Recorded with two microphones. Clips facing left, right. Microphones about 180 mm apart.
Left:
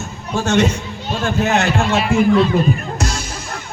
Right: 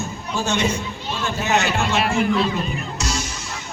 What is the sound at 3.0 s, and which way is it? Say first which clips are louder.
Music: left 3 dB; 55° left (ahead or behind).